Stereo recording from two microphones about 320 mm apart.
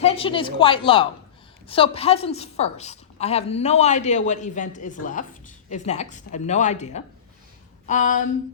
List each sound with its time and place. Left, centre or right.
0.0 s a woman's voice: centre